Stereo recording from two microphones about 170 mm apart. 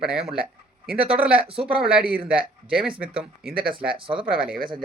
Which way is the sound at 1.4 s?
30° right (ahead or behind).